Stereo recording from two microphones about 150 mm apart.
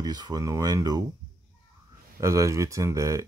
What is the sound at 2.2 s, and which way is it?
Speech, 20° right (ahead or behind).